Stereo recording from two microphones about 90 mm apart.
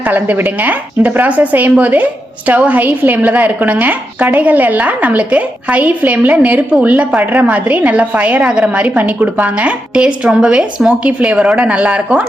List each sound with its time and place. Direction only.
0.1 s a woman's voice: 20° right (ahead or behind)